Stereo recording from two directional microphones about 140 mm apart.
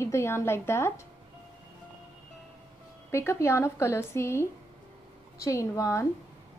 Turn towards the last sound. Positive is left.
turn(degrees=20)  # may be behind; listen again after turning